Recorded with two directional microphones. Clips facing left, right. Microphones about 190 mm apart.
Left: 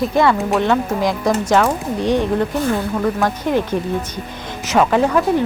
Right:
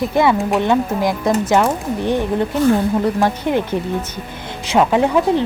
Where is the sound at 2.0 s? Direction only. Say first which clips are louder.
Left 2 dB; 15° left (ahead or behind).